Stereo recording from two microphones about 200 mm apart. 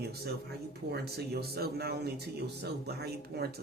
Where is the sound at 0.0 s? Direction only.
50° right (ahead or behind).